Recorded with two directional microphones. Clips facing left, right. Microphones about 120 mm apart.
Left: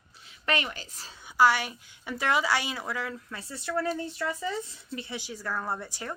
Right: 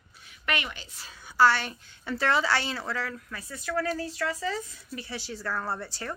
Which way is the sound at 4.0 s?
90° right.